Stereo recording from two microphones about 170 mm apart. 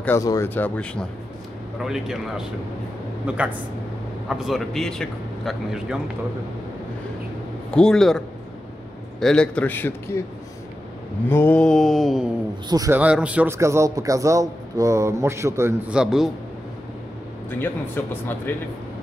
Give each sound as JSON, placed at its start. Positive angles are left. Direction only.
{"t": 0.0, "sound": "speech", "side_deg": 15}
{"t": 1.8, "sound": "a man's voice", "side_deg": -5}
{"t": 7.7, "sound": "a man's voice", "side_deg": 5}
{"t": 9.2, "sound": "speech", "side_deg": 5}
{"t": 11.2, "sound": "a man's voice", "side_deg": 10}
{"t": 12.6, "sound": "speech", "side_deg": -20}
{"t": 12.9, "sound": "a man's voice", "side_deg": -5}
{"t": 15.9, "sound": "a man's voice", "side_deg": -5}
{"t": 17.5, "sound": "speech", "side_deg": 10}